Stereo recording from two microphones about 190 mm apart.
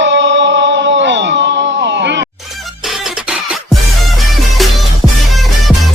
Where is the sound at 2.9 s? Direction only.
Centre (ahead or behind).